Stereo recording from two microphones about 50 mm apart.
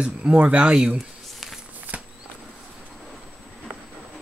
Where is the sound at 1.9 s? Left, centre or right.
Right.